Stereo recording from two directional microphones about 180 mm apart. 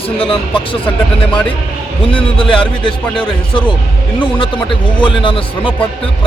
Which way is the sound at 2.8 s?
25° left (ahead or behind).